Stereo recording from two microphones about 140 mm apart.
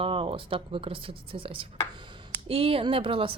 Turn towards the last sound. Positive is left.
turn(degrees=-40)  # may be behind; listen again after turning